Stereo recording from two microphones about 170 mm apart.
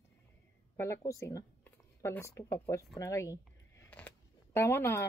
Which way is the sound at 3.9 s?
5° left (ahead or behind).